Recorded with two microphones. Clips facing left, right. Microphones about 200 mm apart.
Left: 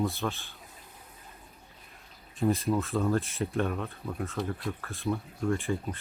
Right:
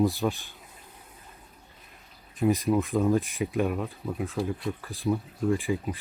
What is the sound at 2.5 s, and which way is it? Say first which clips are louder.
A man's voice: right 4 dB; 15° right (ahead or behind).